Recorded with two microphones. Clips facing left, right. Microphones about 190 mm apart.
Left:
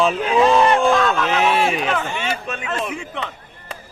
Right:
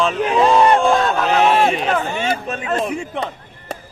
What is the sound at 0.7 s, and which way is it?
Speech, 40° right (ahead or behind).